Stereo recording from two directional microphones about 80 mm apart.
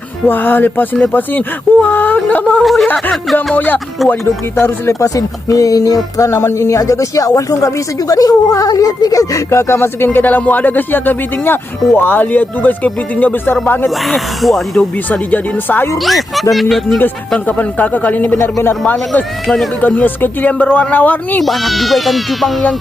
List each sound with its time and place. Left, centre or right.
0.3 s speech: left
2.6 s speech: centre
2.8 s a sound: centre
3.3 s speech: left
4.9 s speech: left
14.1 s speech: centre
15.1 s speech: left
16.0 s speech: centre
17.3 s speech: centre
20.0 s speech: left
21.4 s speech: centre